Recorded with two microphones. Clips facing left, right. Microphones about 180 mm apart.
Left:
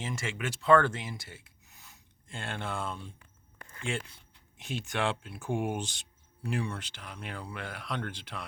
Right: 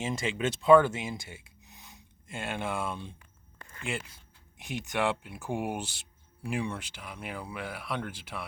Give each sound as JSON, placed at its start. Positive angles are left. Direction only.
{"t": 0.0, "sound": "speech", "side_deg": -20}
{"t": 4.5, "sound": "speech", "side_deg": -15}